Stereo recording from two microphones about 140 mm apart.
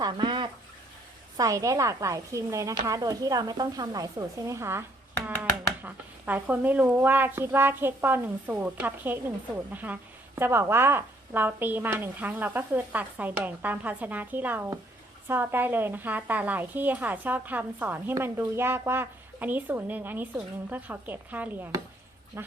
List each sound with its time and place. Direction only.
0.0 s bathtub: 35° right (ahead or behind)
1.4 s a woman's voice: 25° right (ahead or behind)